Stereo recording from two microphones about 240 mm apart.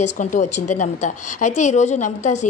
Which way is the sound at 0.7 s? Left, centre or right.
Left.